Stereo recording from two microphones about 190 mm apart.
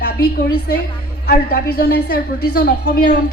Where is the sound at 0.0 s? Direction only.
60° left (ahead or behind).